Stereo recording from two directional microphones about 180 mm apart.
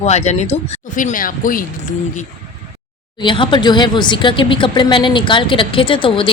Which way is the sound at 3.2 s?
25° left (ahead or behind).